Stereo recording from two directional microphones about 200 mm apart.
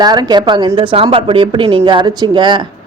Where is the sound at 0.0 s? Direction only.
20° right (ahead or behind).